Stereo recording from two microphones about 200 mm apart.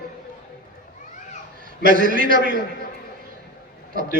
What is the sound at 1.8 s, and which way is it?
Speech, 45° right (ahead or behind).